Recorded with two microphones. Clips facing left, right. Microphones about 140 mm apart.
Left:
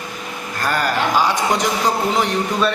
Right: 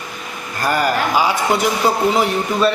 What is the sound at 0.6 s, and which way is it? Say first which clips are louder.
A man's voice: right 2 dB; 10° right (ahead or behind).